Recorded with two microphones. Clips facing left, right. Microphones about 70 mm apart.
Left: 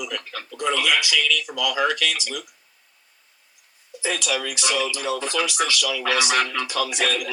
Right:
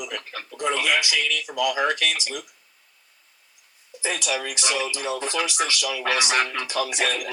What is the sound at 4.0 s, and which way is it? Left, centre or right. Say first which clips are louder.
Speech: left 1 dB; right.